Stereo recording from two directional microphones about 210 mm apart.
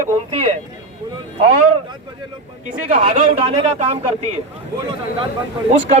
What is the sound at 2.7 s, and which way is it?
Speech, 35° right (ahead or behind).